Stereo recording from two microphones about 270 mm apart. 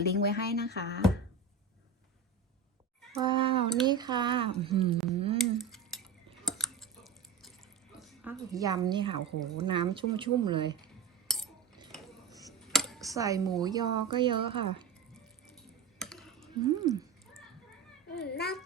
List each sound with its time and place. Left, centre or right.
0.0 s speech: left
3.2 s a child's voice: centre
5.4 s cutlery: centre
6.4 s a sound: centre
7.9 s a woman's voice: centre
12.5 s a sound: centre
13.0 s a child's voice: centre
16.0 s computer keyboard: centre
16.6 s speech: centre
18.1 s a child's voice: left